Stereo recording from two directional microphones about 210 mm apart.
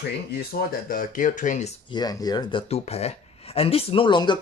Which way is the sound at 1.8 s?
20° left (ahead or behind).